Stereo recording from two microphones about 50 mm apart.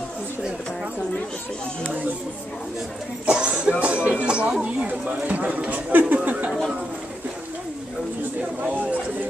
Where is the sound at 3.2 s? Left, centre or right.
Right.